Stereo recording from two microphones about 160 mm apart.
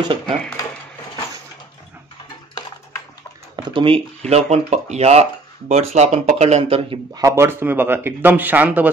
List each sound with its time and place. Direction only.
3.5 s speech: 30° right (ahead or behind)
7.2 s speech: 15° right (ahead or behind)